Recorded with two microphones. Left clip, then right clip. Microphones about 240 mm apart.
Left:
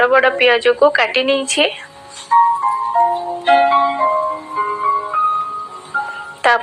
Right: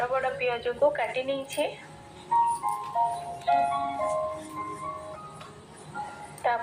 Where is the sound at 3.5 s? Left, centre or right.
Left.